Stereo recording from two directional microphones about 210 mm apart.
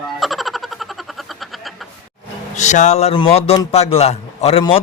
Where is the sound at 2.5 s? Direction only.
35° left (ahead or behind).